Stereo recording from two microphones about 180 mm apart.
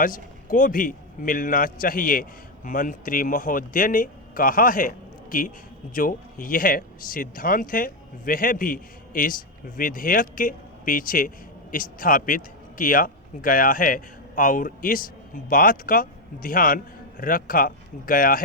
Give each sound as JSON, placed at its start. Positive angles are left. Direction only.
{"t": 0.0, "sound": "speech", "side_deg": 50}